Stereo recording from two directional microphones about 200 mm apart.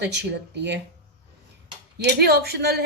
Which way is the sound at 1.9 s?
55° right (ahead or behind).